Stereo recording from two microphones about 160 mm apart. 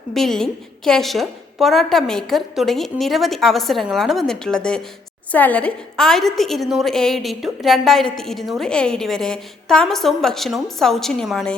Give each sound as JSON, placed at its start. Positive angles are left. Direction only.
{"t": 0.1, "sound": "a woman's voice", "side_deg": 0}